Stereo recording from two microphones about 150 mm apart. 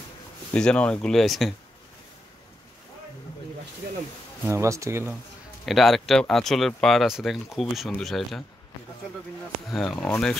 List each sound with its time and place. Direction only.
0.5 s speech: 5° left (ahead or behind)
4.5 s speech: 20° right (ahead or behind)
5.7 s speech: centre (ahead or behind)
9.7 s speech: centre (ahead or behind)